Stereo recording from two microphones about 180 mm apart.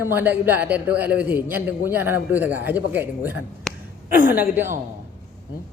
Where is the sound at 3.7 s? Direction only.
Centre (ahead or behind).